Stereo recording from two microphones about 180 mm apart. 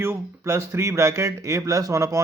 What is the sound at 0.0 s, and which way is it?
A man's voice, 15° right (ahead or behind).